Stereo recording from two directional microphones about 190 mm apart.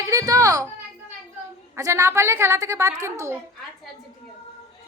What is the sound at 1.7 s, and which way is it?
A woman's voice, 15° right (ahead or behind).